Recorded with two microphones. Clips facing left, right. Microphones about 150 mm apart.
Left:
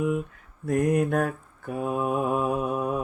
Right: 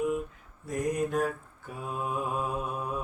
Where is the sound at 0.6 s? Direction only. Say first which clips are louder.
Left 7 dB; 65° left (ahead or behind).